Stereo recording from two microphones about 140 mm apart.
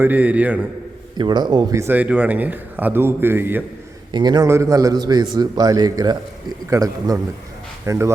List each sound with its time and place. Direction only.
0.0 s a man's voice: 10° right (ahead or behind)
1.2 s speech: 30° right (ahead or behind)
1.8 s a man's voice: 10° right (ahead or behind)
4.1 s a man's voice: 30° right (ahead or behind)